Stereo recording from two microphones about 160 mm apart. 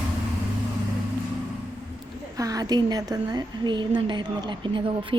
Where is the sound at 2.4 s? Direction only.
20° right (ahead or behind).